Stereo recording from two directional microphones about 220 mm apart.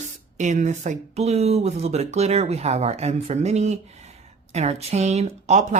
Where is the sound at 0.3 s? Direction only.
35° right (ahead or behind).